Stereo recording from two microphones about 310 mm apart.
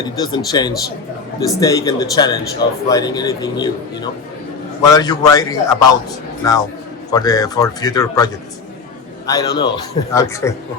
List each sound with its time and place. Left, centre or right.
0.2 s a man's voice: centre